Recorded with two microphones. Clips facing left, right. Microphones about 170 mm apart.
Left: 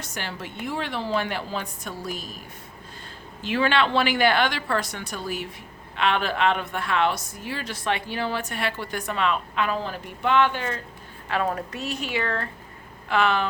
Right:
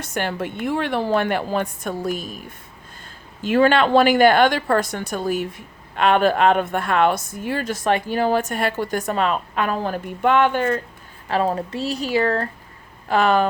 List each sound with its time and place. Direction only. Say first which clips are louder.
0.0 s a woman's voice: right 9 dB; 55° right (ahead or behind)
3.4 s a woman's voice: right 7 dB; 45° right (ahead or behind)
11.3 s speech: right 5 dB; 30° right (ahead or behind)